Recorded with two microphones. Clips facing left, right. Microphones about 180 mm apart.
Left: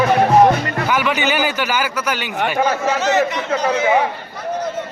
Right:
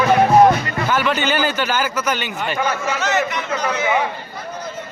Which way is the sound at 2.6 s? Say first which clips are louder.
Left 4 dB; 35° left (ahead or behind).